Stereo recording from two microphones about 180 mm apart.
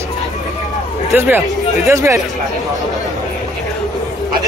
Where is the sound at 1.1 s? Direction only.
10° right (ahead or behind).